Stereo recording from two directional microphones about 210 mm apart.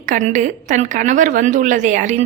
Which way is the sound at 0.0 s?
35° right (ahead or behind).